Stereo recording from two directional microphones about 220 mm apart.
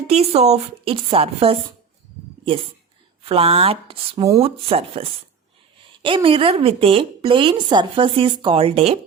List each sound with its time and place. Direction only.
0.1 s a woman's voice: 30° right (ahead or behind)
3.2 s a woman's voice: 25° right (ahead or behind)